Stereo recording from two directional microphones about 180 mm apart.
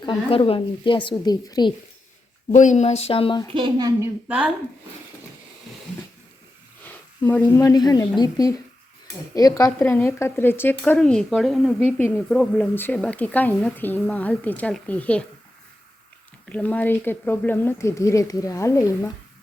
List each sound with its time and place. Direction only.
0.0 s speech: 30° left (ahead or behind)
2.6 s speech: 40° left (ahead or behind)
3.5 s a woman's voice: 25° right (ahead or behind)
4.3 s speech: 5° right (ahead or behind)
6.8 s sniff: 10° left (ahead or behind)
7.5 s speech: 20° left (ahead or behind)
16.5 s speech: 10° left (ahead or behind)